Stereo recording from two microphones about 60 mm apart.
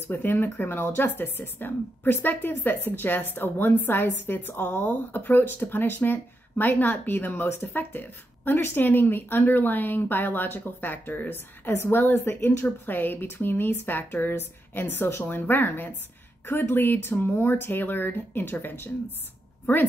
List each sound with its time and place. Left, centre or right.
0.1 s speech: left